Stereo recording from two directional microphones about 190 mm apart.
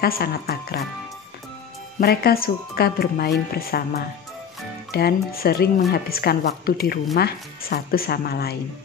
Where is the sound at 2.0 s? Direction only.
55° left (ahead or behind).